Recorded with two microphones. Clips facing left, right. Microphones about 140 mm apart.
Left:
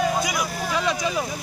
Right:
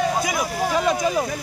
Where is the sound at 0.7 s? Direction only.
45° right (ahead or behind).